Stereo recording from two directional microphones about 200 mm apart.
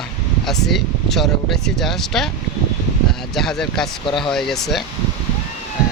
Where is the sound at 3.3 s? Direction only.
Centre (ahead or behind).